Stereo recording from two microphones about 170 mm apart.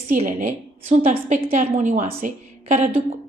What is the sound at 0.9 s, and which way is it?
A woman's voice, 40° right (ahead or behind).